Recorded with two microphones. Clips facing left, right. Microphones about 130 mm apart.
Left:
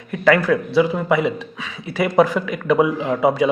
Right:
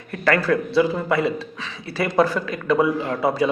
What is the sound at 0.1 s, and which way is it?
A man's voice, 15° left (ahead or behind).